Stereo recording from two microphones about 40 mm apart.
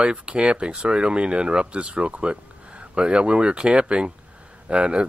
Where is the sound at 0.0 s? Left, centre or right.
Right.